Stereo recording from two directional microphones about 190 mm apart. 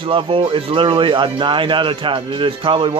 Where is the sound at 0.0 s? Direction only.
30° right (ahead or behind).